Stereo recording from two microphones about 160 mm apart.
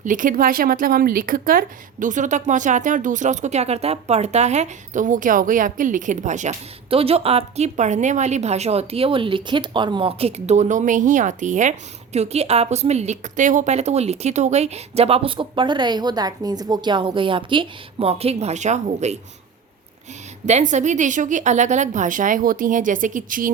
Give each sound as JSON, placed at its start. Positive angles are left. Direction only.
{"t": 0.0, "sound": "a woman's voice", "side_deg": -55}
{"t": 20.5, "sound": "speech", "side_deg": -45}